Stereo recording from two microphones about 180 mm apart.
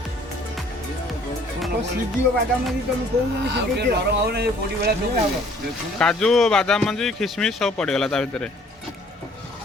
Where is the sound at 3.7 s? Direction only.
65° right (ahead or behind).